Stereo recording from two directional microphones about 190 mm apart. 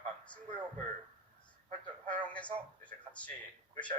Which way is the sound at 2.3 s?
5° left (ahead or behind).